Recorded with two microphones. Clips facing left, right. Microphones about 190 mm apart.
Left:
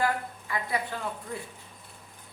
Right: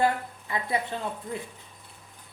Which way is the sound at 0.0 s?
25° right (ahead or behind).